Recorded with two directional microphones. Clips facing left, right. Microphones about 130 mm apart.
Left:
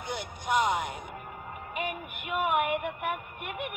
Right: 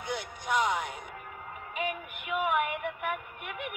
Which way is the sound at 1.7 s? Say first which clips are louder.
Right 1 dB; 65° left (ahead or behind).